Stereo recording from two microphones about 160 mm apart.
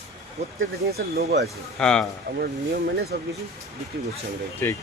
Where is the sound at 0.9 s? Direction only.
80° right.